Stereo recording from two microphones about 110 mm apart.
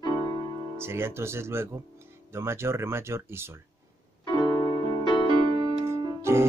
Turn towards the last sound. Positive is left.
turn(degrees=-25)  # may be behind; listen again after turning